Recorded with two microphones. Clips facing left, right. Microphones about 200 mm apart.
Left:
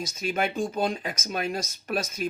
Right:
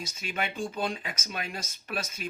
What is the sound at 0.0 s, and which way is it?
Speech, 40° left (ahead or behind).